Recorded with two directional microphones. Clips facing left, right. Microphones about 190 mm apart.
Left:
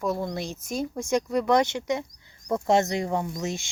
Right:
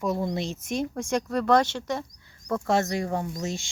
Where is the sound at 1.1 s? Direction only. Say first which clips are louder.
Even; 10° left (ahead or behind).